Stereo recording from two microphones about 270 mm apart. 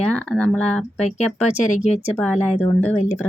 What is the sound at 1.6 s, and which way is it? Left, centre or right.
Speech, left.